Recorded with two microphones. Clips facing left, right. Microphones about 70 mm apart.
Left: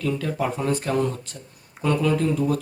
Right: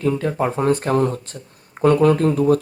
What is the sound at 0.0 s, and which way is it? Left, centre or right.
Speech, right.